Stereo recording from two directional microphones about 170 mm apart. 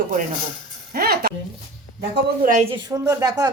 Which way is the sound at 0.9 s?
65° right (ahead or behind).